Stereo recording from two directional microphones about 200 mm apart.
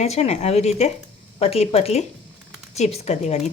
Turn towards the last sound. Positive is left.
turn(degrees=35)  # may be behind; listen again after turning